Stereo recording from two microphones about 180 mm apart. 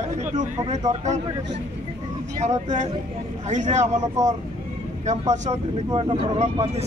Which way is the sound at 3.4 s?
40° right (ahead or behind).